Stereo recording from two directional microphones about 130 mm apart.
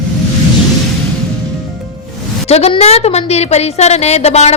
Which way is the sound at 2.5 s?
50° left (ahead or behind).